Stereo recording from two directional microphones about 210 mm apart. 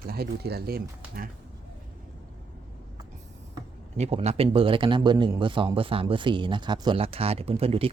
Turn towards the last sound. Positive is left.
turn(degrees=-25)  # may be behind; listen again after turning